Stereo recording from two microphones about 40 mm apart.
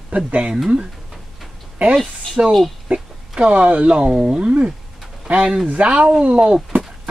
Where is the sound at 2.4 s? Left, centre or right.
Right.